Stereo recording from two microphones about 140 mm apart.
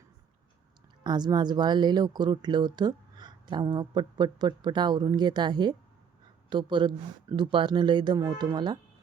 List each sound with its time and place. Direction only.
1.0 s a woman's voice: 30° right (ahead or behind)